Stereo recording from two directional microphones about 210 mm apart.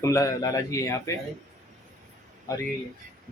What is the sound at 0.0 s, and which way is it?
A man's voice, 15° left (ahead or behind).